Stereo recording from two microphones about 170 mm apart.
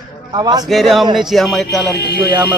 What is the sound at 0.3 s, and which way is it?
Speech, 25° right (ahead or behind).